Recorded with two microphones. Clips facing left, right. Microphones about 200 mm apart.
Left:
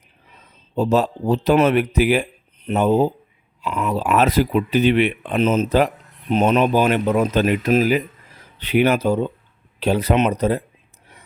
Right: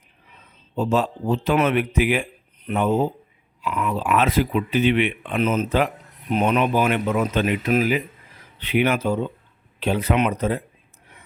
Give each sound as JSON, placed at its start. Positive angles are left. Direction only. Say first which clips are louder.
{"t": 0.8, "sound": "speech", "louder": "left 3 dB", "side_deg": 40}
{"t": 3.8, "sound": "speech", "louder": "left 3 dB", "side_deg": 40}